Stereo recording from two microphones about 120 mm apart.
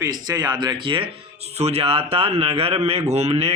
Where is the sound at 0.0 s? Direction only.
35° right (ahead or behind).